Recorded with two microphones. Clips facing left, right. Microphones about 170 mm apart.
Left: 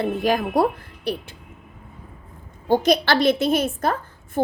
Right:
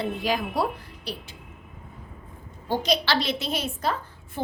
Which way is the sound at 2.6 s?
50° left (ahead or behind).